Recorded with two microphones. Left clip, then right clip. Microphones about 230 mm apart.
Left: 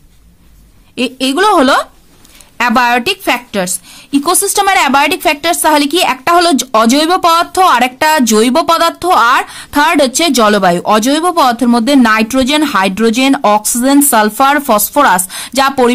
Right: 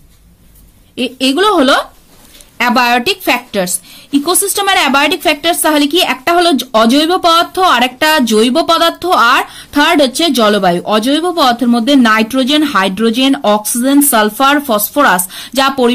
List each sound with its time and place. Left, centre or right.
0.9 s a woman's voice: left